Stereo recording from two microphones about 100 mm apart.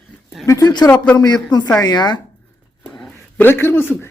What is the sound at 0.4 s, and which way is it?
A man's voice, 35° left (ahead or behind).